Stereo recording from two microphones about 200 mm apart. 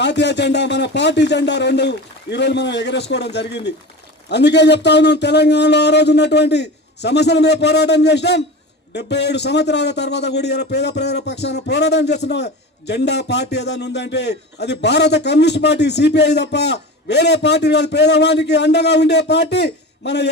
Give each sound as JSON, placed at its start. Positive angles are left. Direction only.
{"t": 0.0, "sound": "a man's voice", "side_deg": 60}